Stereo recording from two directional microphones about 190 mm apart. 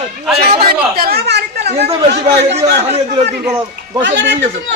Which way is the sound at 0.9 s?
55° right (ahead or behind).